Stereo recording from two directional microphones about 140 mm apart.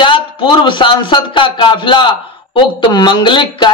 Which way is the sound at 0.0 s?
35° left (ahead or behind).